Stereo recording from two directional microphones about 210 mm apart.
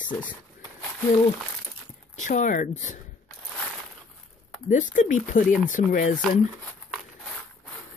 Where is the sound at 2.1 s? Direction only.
35° left (ahead or behind).